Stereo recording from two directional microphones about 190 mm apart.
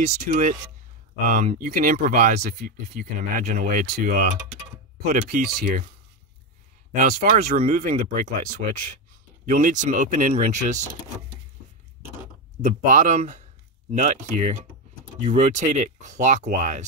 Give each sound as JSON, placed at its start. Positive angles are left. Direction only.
{"t": 0.0, "sound": "speech", "side_deg": -45}
{"t": 3.8, "sound": "speech", "side_deg": -60}
{"t": 4.1, "sound": "speech", "side_deg": -45}
{"t": 6.9, "sound": "speech", "side_deg": -45}
{"t": 12.6, "sound": "speech", "side_deg": -40}